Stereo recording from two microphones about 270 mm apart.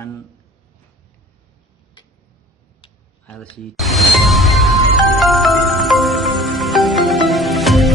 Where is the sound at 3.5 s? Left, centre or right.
Centre.